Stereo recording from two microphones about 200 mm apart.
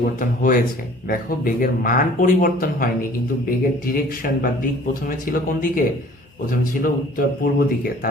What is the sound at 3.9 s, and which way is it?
Speech, 45° left (ahead or behind).